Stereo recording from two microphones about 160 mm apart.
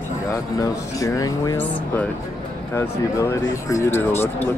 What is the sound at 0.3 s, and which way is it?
Speech, 20° left (ahead or behind).